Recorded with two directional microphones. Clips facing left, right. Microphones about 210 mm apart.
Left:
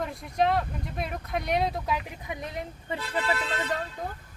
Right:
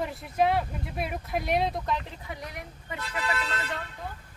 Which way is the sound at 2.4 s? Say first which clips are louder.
Left 5 dB; 25° left (ahead or behind).